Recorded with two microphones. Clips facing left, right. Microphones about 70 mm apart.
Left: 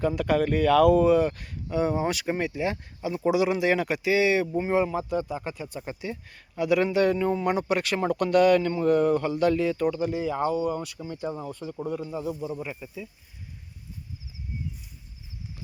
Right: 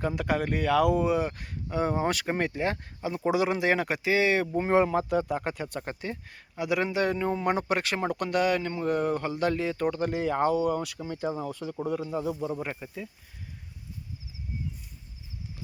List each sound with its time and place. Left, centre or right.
0.2 s speech: right
4.6 s speech: right
6.3 s speech: right
12.4 s speech: right